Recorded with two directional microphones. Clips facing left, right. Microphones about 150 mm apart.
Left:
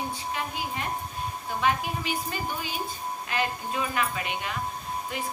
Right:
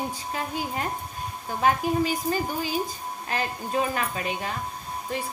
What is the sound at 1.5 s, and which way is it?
A woman's voice, 40° right (ahead or behind).